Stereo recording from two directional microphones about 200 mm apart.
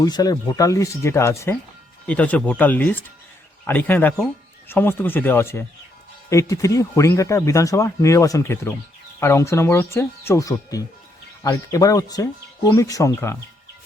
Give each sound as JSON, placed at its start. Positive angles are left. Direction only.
{"t": 0.0, "sound": "speech", "side_deg": 20}